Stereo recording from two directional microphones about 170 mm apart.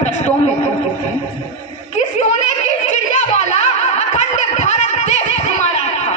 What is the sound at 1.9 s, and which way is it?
Snicker, 40° left (ahead or behind).